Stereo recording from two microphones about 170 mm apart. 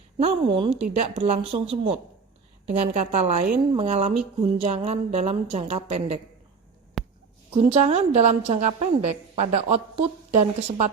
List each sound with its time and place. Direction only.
0.2 s a woman's voice: 35° right (ahead or behind)
7.0 s a sound: centre (ahead or behind)
7.7 s a woman's voice: 35° right (ahead or behind)